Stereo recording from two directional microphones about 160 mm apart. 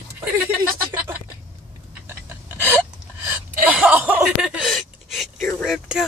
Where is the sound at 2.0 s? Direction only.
15° right (ahead or behind).